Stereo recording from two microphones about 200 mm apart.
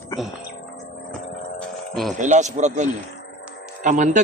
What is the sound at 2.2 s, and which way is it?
A man's voice, 35° right (ahead or behind).